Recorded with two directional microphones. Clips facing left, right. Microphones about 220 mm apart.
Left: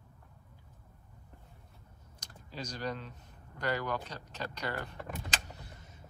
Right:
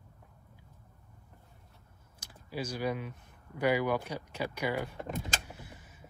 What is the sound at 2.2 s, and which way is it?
Speech, 10° right (ahead or behind).